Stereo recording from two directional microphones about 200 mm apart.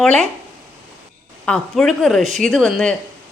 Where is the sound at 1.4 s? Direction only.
5° left (ahead or behind).